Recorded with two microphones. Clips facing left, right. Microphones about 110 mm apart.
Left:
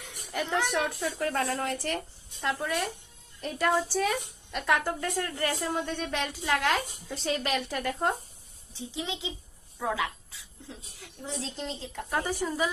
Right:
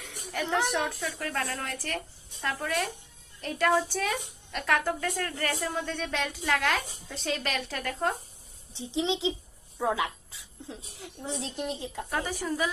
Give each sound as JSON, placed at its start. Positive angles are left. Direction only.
{"t": 0.4, "sound": "a woman's voice", "side_deg": -20}
{"t": 1.4, "sound": "a woman's voice", "side_deg": 30}
{"t": 2.4, "sound": "a woman's voice", "side_deg": 15}
{"t": 2.6, "sound": "a woman's voice", "side_deg": 5}
{"t": 8.7, "sound": "a woman's voice", "side_deg": -25}
{"t": 12.1, "sound": "a woman's voice", "side_deg": 10}